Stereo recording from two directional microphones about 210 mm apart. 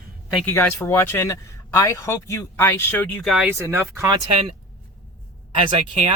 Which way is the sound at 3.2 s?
5° right (ahead or behind).